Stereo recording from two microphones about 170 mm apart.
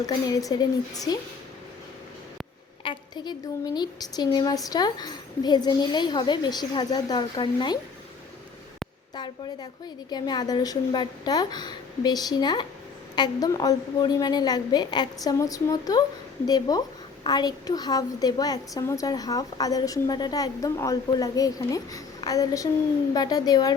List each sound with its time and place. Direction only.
0.0 s a woman's voice: 20° left (ahead or behind)
2.8 s a woman's voice: 25° left (ahead or behind)
9.1 s a woman's voice: 25° left (ahead or behind)